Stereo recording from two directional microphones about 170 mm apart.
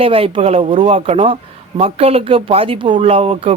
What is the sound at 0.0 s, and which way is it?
Speech, 35° right (ahead or behind).